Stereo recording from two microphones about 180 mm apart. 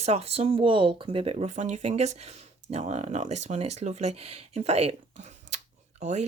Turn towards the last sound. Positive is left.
turn(degrees=-40)  # may be behind; listen again after turning